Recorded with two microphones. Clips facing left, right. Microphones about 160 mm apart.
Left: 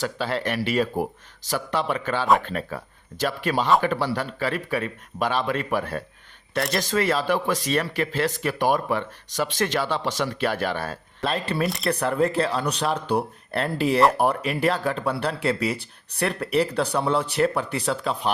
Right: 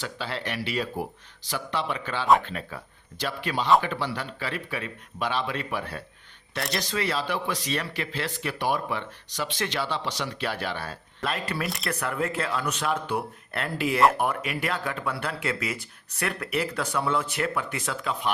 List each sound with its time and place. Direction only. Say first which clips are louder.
0.0 s speech: left 7 dB; 45° left (ahead or behind)
11.2 s speech: left 4 dB; 30° left (ahead or behind)
11.6 s speech: left 6 dB; centre (ahead or behind)
11.9 s speech: left 7 dB; 35° left (ahead or behind)